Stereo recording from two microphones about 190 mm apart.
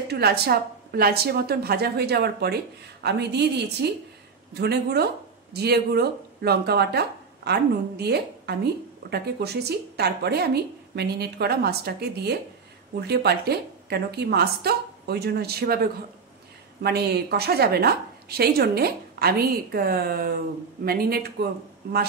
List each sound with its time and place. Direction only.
0.1 s a woman's voice: 55° right (ahead or behind)